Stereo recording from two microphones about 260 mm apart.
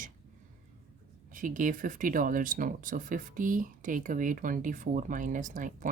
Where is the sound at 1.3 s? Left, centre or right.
Right.